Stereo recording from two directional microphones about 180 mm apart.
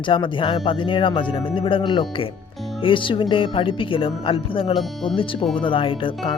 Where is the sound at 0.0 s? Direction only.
30° left (ahead or behind).